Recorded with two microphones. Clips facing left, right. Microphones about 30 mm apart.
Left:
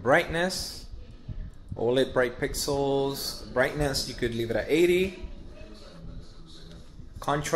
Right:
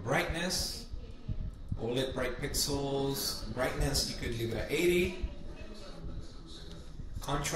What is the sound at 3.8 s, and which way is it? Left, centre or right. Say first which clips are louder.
Speech: left 7 dB; left.